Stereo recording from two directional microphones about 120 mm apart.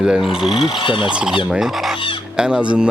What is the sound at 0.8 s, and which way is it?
Fowl, 45° left (ahead or behind).